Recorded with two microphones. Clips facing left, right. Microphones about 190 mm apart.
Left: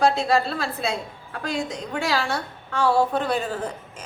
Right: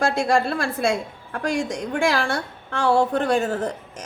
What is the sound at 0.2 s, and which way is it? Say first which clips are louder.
A woman's voice: right 2 dB; 50° right (ahead or behind).